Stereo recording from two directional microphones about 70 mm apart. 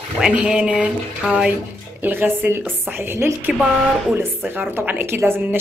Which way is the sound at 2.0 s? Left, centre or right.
Right.